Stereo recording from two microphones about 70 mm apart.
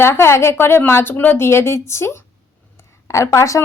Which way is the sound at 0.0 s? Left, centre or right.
Left.